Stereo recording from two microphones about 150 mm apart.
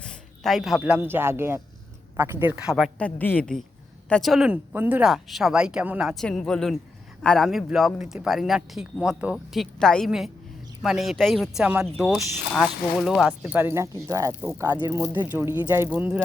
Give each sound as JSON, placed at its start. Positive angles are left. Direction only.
{"t": 0.0, "sound": "a sound", "side_deg": 5}
{"t": 0.8, "sound": "speech", "side_deg": -10}
{"t": 3.0, "sound": "a woman's voice", "side_deg": 10}
{"t": 13.4, "sound": "speech", "side_deg": -15}